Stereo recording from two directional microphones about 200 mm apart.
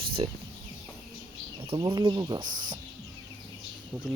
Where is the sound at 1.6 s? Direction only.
25° right (ahead or behind).